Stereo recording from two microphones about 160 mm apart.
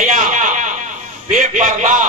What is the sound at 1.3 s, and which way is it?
Speech, 55° right (ahead or behind).